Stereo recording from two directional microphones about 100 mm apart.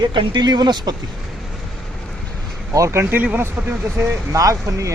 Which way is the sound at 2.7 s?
30° right (ahead or behind).